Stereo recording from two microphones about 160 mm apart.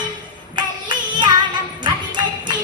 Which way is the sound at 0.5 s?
30° right (ahead or behind).